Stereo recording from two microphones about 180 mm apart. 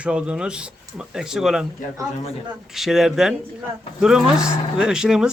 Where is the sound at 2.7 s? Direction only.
Centre (ahead or behind).